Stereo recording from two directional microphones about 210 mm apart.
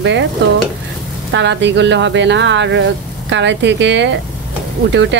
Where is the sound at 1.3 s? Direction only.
60° right (ahead or behind).